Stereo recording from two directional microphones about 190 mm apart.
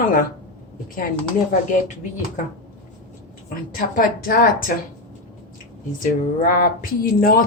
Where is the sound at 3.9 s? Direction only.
50° left (ahead or behind).